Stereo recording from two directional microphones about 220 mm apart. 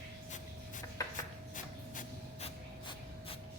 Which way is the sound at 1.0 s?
15° left (ahead or behind).